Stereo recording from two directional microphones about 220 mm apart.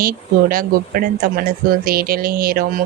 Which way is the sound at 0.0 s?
40° right (ahead or behind).